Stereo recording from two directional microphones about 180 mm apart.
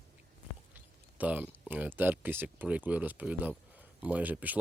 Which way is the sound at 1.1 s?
10° right (ahead or behind).